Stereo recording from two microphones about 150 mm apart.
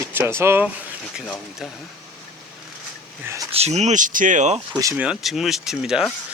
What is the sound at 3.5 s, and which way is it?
Speech, 45° right (ahead or behind).